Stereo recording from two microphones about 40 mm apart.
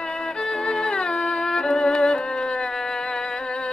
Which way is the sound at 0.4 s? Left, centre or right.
Centre.